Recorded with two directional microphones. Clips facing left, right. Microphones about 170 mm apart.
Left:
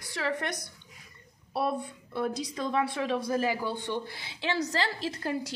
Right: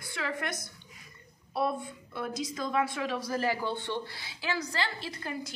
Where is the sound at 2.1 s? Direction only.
35° left (ahead or behind).